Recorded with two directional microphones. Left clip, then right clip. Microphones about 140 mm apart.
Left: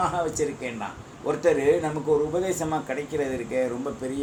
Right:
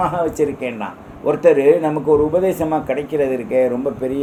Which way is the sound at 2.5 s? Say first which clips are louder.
Right 9 dB; 85° right.